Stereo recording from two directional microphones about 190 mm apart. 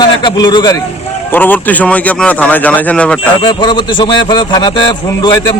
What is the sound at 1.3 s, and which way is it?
Speech, 10° left (ahead or behind).